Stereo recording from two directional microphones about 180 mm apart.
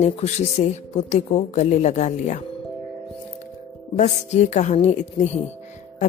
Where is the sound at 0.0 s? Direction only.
35° left (ahead or behind).